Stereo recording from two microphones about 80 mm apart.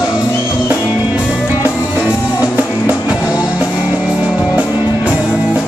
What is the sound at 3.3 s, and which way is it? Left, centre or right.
Music, centre.